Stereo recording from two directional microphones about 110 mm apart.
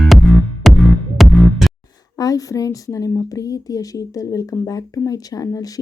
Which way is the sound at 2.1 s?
35° left (ahead or behind).